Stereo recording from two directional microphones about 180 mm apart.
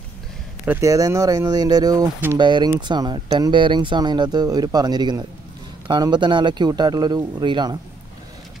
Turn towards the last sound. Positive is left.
turn(degrees=-25)  # may be behind; listen again after turning